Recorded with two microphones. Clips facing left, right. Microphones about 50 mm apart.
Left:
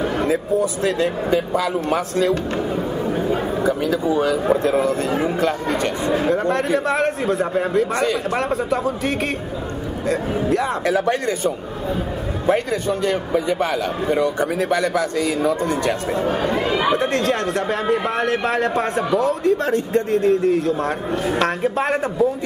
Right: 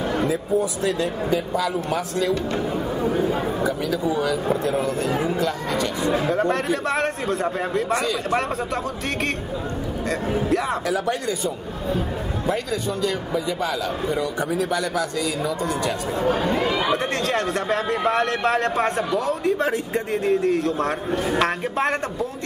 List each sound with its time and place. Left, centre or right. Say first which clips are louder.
0.8 s a man's voice: left 3 dB; left
3.6 s a man's voice: left 6 dB; left
6.3 s speech: left 3 dB; centre
10.9 s a man's voice: left 4 dB; left
16.9 s speech: left 3 dB; centre